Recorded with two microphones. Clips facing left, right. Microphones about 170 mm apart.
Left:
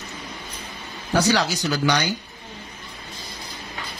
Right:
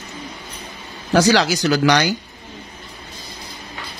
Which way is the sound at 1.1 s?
90° right.